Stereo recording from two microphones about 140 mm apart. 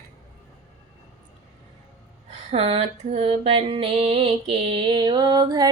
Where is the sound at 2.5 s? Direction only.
45° right (ahead or behind); by 5.7 s 30° right (ahead or behind).